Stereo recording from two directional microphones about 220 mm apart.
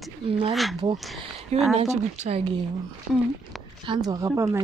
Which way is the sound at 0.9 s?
Centre (ahead or behind).